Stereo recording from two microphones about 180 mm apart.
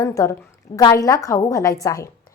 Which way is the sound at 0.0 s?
15° left (ahead or behind).